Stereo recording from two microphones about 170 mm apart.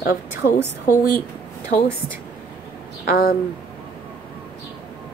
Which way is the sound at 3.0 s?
60° left (ahead or behind).